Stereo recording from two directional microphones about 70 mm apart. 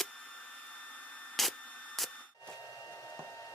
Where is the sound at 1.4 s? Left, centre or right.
Centre.